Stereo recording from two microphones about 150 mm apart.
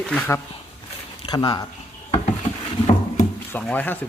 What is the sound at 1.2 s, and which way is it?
Speech, 25° left (ahead or behind).